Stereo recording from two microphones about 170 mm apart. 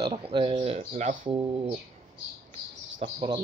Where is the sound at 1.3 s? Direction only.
30° right (ahead or behind).